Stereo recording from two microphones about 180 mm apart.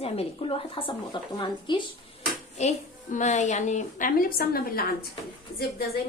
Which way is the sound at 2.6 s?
40° left (ahead or behind).